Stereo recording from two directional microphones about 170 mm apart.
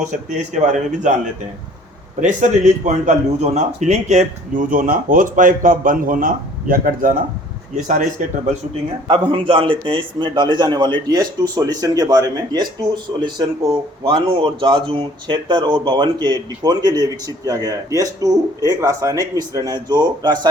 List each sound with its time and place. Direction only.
0.0 s a man's voice: 45° right (ahead or behind)
8.2 s a man's voice: 45° right (ahead or behind)
9.0 s a man's voice: 30° right (ahead or behind)